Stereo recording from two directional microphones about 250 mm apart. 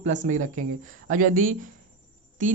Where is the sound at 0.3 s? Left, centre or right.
Right.